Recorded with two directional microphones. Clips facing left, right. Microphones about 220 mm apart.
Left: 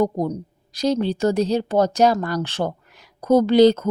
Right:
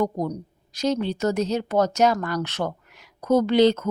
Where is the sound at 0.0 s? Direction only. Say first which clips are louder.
Left 4 dB; 30° left (ahead or behind).